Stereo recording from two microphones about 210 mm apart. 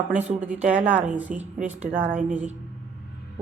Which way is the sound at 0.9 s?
5° right (ahead or behind).